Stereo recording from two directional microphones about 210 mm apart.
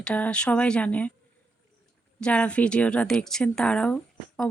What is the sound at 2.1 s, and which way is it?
Speech, 5° left (ahead or behind).